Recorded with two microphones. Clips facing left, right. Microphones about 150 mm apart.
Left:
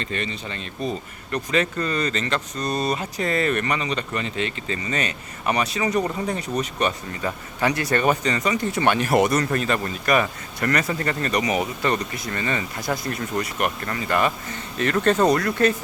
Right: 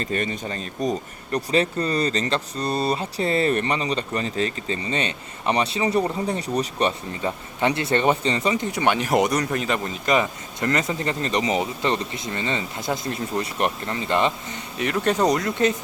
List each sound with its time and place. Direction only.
0.0 s speech: 45° right (ahead or behind)
8.6 s speech: 15° right (ahead or behind)
14.8 s speech: 15° right (ahead or behind)